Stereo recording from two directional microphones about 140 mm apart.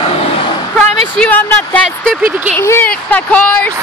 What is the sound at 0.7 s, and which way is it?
Speech, 5° left (ahead or behind).